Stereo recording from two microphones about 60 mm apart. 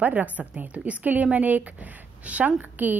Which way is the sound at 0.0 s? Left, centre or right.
Right.